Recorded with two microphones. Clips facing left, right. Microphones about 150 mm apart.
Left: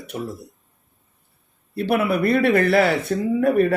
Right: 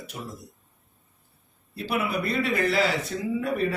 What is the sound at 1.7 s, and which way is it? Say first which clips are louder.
Speech: left 7 dB; 60° left (ahead or behind).